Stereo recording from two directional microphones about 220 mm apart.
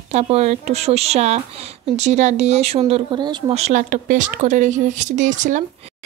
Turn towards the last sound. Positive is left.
turn(degrees=-35)  # may be behind; listen again after turning